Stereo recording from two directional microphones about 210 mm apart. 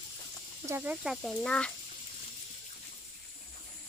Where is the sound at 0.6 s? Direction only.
10° right (ahead or behind).